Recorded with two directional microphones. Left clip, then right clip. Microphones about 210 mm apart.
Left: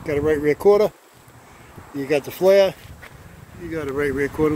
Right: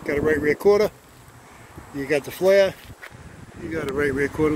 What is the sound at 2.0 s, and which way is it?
Speech, 15° left (ahead or behind).